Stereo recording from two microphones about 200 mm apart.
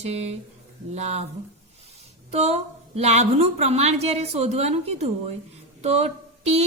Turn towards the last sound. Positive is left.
turn(degrees=-30)  # may be behind; listen again after turning